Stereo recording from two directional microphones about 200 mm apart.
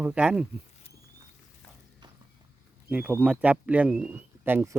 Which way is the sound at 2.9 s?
10° right (ahead or behind).